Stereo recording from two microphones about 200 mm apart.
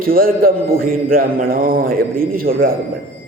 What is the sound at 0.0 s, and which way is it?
Mantra, 45° right (ahead or behind).